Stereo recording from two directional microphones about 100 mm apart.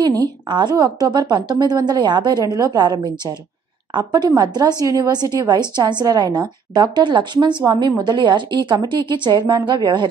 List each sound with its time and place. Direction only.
0.2 s a woman's voice: 50° right (ahead or behind)